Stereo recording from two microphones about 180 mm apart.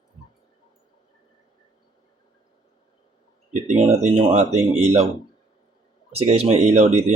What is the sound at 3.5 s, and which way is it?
Speech, 40° right (ahead or behind).